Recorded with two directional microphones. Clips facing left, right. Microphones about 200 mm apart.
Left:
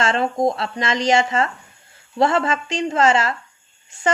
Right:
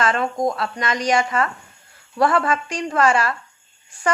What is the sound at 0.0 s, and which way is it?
Speech, 25° left (ahead or behind).